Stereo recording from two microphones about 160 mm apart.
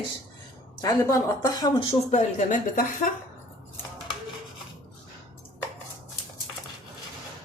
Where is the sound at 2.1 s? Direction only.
50° left (ahead or behind).